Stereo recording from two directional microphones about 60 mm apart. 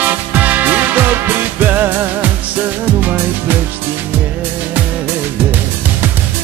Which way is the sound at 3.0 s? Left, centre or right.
Right.